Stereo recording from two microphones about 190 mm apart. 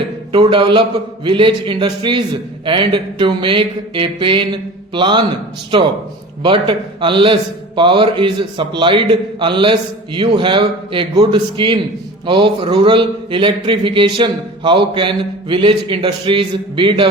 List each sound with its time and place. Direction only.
0.3 s speech: 25° right (ahead or behind)
6.4 s speech: 25° right (ahead or behind)